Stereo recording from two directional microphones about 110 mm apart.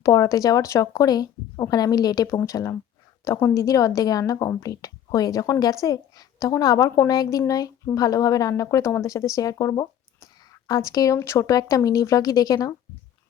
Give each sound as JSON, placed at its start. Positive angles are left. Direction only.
{"t": 0.0, "sound": "a woman's voice", "side_deg": 30}